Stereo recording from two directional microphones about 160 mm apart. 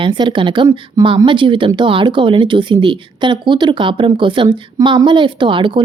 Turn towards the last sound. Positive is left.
turn(degrees=-30)  # may be behind; listen again after turning